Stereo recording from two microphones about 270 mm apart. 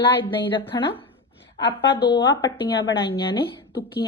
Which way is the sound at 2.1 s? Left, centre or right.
Centre.